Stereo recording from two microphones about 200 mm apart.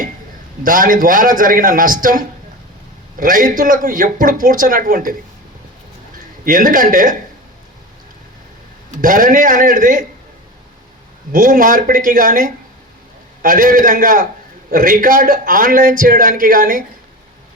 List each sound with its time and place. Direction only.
0.6 s a man's voice: 45° right (ahead or behind)
6.4 s a man's voice: 45° right (ahead or behind)
9.0 s a man's voice: 40° right (ahead or behind)
11.3 s a man's voice: 45° right (ahead or behind)